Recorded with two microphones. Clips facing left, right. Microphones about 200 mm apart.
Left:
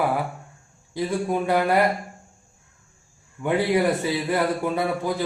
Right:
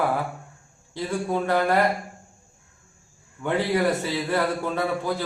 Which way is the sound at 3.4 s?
10° left (ahead or behind).